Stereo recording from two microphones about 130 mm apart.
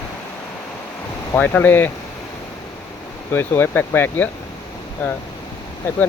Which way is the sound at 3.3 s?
15° left (ahead or behind).